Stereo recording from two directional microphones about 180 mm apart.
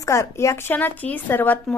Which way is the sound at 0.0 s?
15° left (ahead or behind).